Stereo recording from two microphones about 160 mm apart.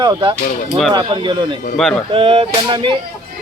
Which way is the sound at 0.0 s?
25° right (ahead or behind).